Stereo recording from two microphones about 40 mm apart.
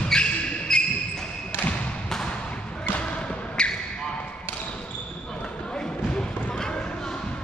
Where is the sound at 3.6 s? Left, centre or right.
Left.